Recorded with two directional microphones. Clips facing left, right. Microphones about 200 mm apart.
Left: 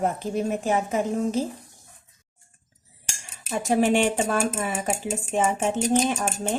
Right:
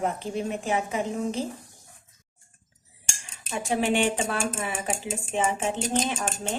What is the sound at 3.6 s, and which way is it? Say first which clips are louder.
A woman's voice: left 4 dB; 40° left (ahead or behind).